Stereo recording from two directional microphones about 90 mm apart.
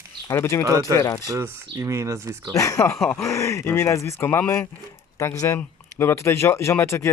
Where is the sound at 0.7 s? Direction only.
40° right (ahead or behind).